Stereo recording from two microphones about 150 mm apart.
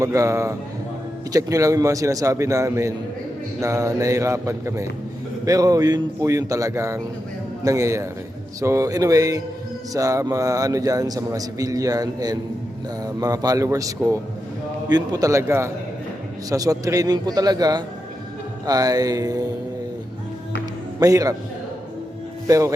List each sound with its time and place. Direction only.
0.0 s a man's voice: 20° right (ahead or behind)
21.0 s a man's voice: 25° right (ahead or behind)
22.4 s a man's voice: 20° right (ahead or behind)